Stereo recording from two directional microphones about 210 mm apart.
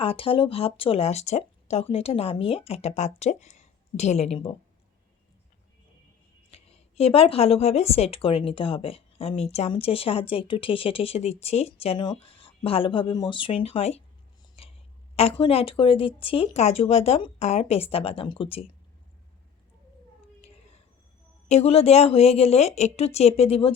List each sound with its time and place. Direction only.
0.0 s a woman's voice: 25° left (ahead or behind)
6.5 s a woman's voice: 30° left (ahead or behind)
15.4 s a woman's voice: 25° left (ahead or behind)
21.4 s a woman's voice: 30° left (ahead or behind)